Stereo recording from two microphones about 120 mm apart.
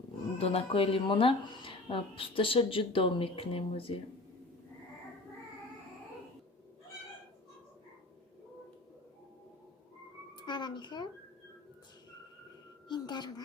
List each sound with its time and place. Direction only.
0.3 s speech: 55° left (ahead or behind)
10.3 s speech: 40° left (ahead or behind)
12.9 s a woman's voice: 35° left (ahead or behind)